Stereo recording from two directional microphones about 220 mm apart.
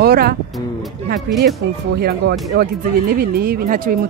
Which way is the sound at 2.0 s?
45° right (ahead or behind).